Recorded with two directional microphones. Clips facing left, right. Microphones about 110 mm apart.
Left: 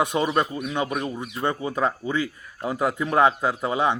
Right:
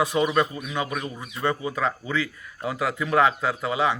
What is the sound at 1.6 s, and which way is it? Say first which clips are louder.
A man's voice: left 2 dB; 35° left (ahead or behind).